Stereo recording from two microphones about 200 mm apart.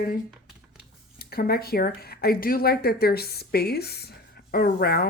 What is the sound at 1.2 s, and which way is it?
Speech, 50° left (ahead or behind).